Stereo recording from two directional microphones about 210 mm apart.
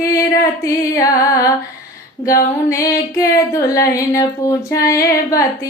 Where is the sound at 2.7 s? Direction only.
15° left (ahead or behind).